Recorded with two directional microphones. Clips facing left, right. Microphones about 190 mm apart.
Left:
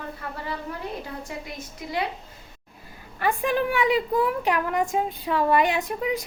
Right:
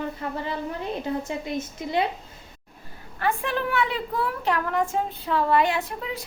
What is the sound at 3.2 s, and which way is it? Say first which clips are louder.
A woman's voice: left 2 dB; 15° left (ahead or behind).